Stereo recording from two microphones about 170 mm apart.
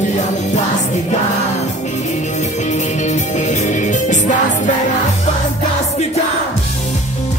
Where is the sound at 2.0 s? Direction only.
45° left (ahead or behind).